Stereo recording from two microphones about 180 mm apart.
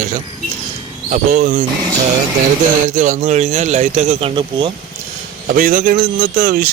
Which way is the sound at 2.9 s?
40° right (ahead or behind).